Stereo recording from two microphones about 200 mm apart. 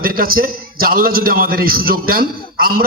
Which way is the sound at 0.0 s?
45° right (ahead or behind).